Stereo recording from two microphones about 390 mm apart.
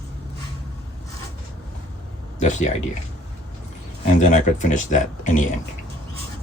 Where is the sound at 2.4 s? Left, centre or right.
Centre.